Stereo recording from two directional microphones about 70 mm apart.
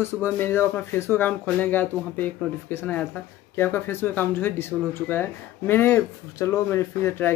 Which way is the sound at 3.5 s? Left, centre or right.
Left.